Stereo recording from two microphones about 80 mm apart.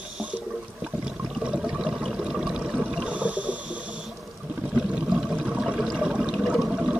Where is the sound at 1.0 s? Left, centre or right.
Centre.